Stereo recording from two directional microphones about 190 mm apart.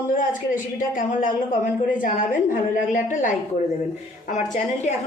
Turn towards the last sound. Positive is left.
turn(degrees=35)  # may be behind; listen again after turning